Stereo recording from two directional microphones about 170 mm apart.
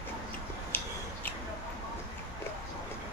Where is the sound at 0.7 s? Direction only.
10° left (ahead or behind).